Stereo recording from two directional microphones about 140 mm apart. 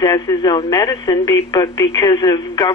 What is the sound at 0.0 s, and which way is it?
Speech, 30° left (ahead or behind).